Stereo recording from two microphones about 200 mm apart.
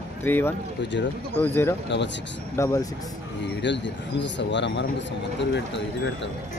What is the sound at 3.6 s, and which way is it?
Speech, 60° left (ahead or behind).